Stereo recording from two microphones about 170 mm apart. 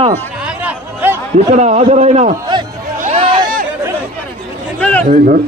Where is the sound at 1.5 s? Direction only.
45° right (ahead or behind).